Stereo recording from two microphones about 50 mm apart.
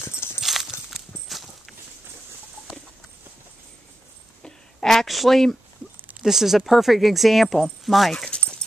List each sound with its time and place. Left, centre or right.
0.0 s clip-clop: left
0.4 s clip-clop: centre
0.7 s a sound: centre
4.4 s a sound: centre
6.2 s speech: centre
8.3 s dog: centre